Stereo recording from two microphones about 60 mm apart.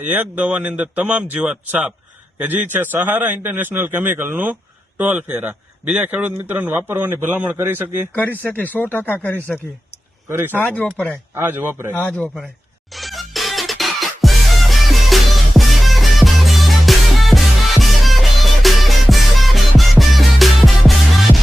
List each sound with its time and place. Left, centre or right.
0.0 s speech: right
1.2 s speech: centre
2.4 s a man's voice: right
8.1 s speech: left
10.2 s a man's voice: right
10.6 s speech: left
11.3 s a man's voice: right
11.9 s speech: left
12.9 s music: centre